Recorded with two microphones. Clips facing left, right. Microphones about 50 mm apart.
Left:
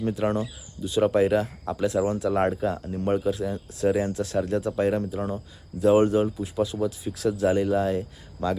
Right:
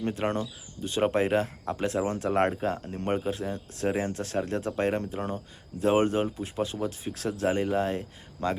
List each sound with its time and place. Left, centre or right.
0.0 s speech: right